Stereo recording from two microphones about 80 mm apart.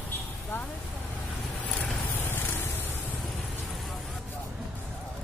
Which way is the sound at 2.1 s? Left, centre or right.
Left.